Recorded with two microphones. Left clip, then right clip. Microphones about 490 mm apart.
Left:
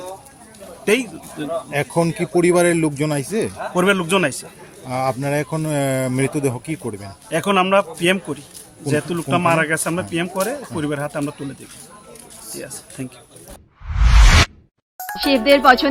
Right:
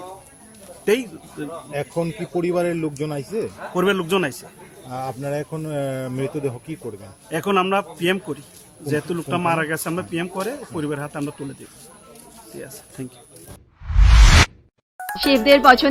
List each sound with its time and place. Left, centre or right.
0.9 s speech: right
1.5 s speech: centre
3.8 s speech: right
4.9 s speech: centre
7.3 s speech: right
12.5 s speech: right
14.9 s speech: centre